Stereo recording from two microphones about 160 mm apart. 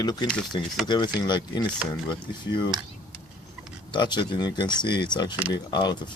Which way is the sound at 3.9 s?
30° left (ahead or behind).